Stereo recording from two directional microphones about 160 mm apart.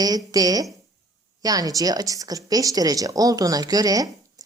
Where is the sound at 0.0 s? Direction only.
25° right (ahead or behind).